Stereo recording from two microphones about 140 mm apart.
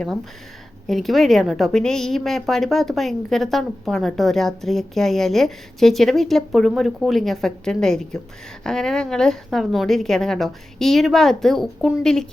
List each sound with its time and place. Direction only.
0.9 s a woman's voice: centre (ahead or behind)